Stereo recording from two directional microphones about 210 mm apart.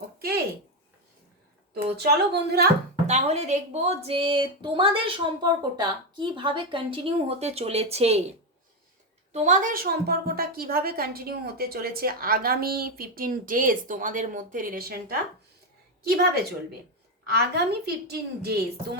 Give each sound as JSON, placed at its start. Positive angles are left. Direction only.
{"t": 1.7, "sound": "a woman's voice", "side_deg": -50}
{"t": 3.1, "sound": "speech", "side_deg": -30}
{"t": 9.3, "sound": "a woman's voice", "side_deg": -35}
{"t": 16.0, "sound": "a woman's voice", "side_deg": -45}